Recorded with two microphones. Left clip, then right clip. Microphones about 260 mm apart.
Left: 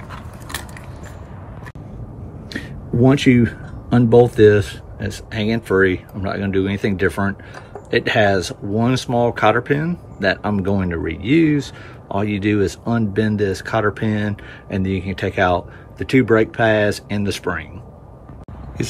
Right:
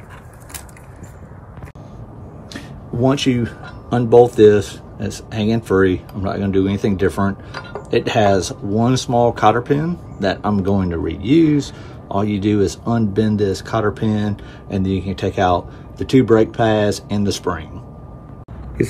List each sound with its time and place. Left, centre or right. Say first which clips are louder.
3.1 s speech: left 3 dB; centre